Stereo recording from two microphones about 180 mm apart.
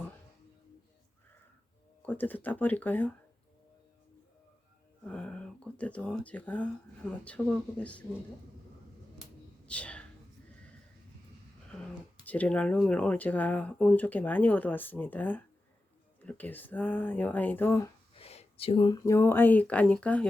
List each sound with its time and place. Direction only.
2.0 s speech: 10° left (ahead or behind)
5.0 s speech: 5° left (ahead or behind)
9.6 s a sound: 5° left (ahead or behind)
12.2 s speech: 10° left (ahead or behind)
18.1 s speech: 35° left (ahead or behind); by 20.2 s 5° left (ahead or behind)